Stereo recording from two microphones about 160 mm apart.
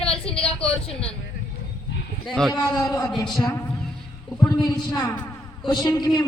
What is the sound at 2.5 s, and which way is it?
Speech, 25° left (ahead or behind).